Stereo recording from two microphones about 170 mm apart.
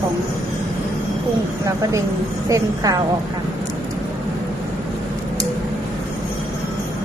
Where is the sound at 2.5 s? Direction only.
20° right (ahead or behind).